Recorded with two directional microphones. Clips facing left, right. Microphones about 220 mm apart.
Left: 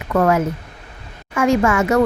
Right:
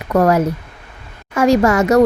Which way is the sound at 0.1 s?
40° right (ahead or behind).